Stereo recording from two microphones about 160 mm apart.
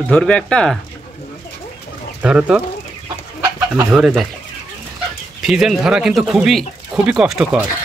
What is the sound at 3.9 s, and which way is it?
Speech, 5° right (ahead or behind).